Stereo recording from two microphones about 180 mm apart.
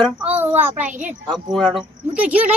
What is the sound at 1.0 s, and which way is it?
Speech, centre (ahead or behind).